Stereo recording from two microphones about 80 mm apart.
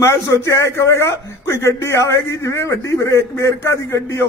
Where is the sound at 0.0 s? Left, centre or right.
Left.